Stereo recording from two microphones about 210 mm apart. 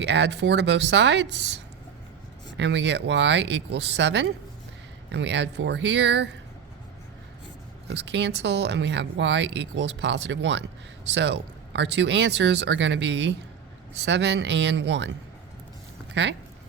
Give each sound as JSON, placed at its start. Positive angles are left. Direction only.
{"t": 0.0, "sound": "speech", "side_deg": -55}
{"t": 2.6, "sound": "speech", "side_deg": -55}
{"t": 7.9, "sound": "speech", "side_deg": -55}